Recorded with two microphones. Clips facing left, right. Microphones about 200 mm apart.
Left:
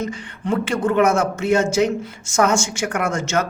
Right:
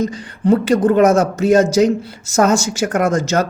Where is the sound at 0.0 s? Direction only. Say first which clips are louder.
Right 8 dB; 35° right (ahead or behind).